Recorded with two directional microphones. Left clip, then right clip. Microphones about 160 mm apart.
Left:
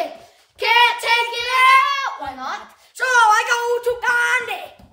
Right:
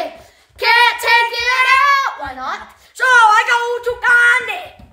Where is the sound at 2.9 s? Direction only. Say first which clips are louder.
Right 5 dB; 25° left (ahead or behind).